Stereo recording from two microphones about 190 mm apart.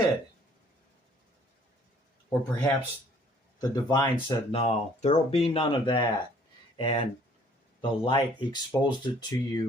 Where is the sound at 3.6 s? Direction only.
20° left (ahead or behind).